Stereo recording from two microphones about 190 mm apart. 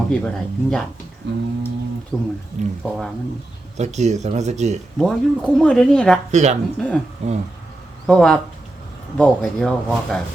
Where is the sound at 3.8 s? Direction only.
35° right (ahead or behind).